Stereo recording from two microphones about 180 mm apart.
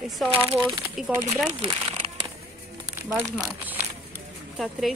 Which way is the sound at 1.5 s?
30° right (ahead or behind).